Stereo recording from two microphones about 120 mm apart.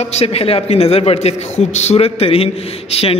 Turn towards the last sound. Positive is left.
turn(degrees=55)  # may be behind; listen again after turning